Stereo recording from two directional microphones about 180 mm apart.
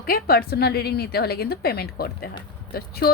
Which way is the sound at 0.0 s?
60° left (ahead or behind).